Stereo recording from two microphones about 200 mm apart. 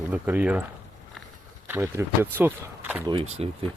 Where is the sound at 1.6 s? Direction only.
15° right (ahead or behind).